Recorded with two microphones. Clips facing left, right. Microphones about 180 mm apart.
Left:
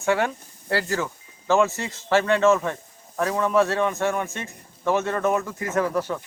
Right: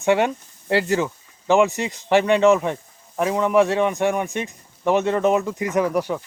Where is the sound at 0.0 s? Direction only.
20° right (ahead or behind).